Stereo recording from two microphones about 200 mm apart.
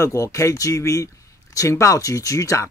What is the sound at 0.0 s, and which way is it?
Speech, 15° left (ahead or behind).